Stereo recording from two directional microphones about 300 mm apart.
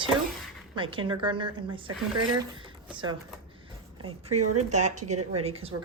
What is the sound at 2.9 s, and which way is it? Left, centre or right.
Speech, centre.